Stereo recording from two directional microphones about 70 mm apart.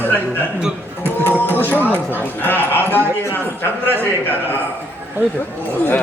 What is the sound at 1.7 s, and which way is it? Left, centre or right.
Speech, left.